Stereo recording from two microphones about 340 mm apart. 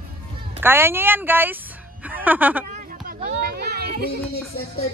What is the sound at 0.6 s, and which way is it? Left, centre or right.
Speech, centre.